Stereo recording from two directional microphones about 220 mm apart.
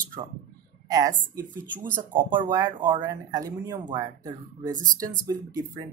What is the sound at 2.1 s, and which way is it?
Speech, 10° right (ahead or behind).